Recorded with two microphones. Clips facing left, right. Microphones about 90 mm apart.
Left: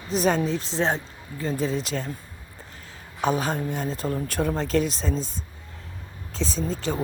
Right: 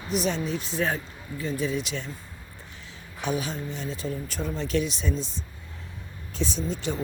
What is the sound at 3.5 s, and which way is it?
Speech, 50° left (ahead or behind).